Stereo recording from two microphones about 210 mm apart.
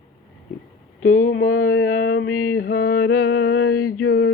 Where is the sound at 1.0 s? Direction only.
80° left.